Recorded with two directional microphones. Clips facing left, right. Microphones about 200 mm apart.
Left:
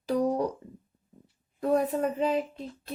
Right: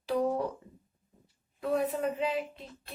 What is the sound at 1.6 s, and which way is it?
Speech, 45° left (ahead or behind).